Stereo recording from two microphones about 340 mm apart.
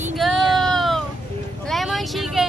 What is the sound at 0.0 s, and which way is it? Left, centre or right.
Child singing, centre.